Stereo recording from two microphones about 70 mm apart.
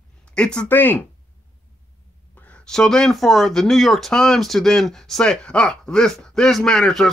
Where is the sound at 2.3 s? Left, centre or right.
Left.